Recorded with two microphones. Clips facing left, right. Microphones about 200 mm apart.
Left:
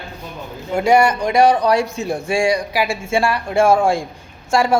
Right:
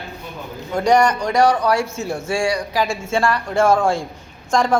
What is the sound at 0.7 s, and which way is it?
A man's voice, 10° left (ahead or behind).